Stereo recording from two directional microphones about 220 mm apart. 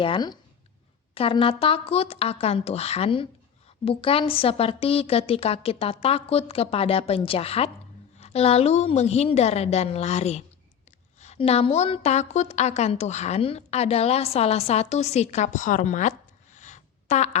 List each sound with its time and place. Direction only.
0.0 s a woman's voice: 20° left (ahead or behind)